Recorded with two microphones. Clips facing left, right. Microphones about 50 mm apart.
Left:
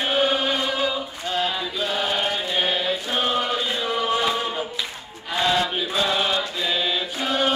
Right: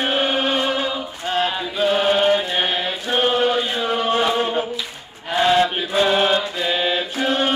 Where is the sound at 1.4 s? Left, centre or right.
Right.